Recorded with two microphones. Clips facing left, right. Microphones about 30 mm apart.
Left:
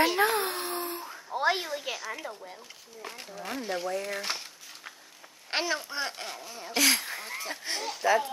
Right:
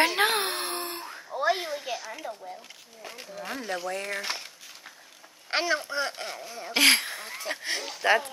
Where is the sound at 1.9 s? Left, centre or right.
Left.